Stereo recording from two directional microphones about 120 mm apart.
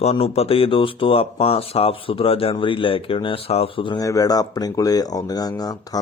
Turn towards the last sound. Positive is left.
turn(degrees=30)  # may be behind; listen again after turning